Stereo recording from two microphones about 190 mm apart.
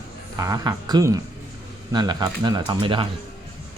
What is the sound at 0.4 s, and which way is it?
Speech, 20° right (ahead or behind).